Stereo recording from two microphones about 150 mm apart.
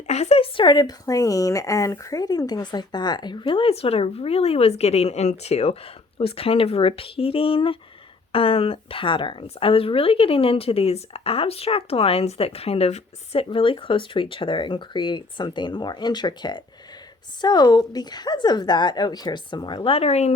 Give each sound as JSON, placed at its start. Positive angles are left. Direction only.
{"t": 0.1, "sound": "speech", "side_deg": 45}